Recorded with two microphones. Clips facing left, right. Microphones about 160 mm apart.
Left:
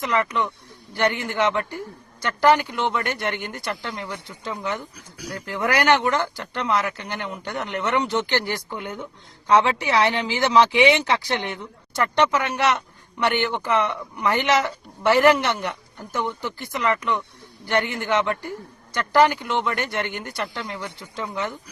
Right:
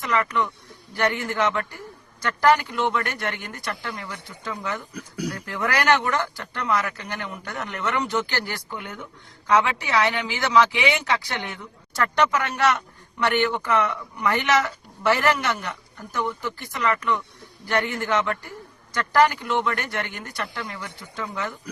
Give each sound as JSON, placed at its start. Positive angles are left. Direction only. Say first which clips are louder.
{"t": 0.0, "sound": "speech", "louder": "left 1 dB", "side_deg": 20}
{"t": 4.9, "sound": "speech", "louder": "right 9 dB", "side_deg": -60}
{"t": 5.5, "sound": "speech", "louder": "left 3 dB", "side_deg": 20}